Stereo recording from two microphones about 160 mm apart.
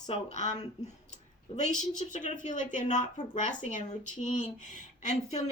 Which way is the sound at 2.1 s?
50° left (ahead or behind).